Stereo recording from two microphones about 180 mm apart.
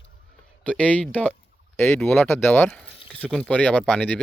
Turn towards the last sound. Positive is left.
turn(degrees=5)  # may be behind; listen again after turning